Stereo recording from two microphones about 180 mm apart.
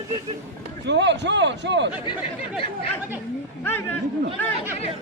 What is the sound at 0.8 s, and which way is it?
A man's voice, 80° right.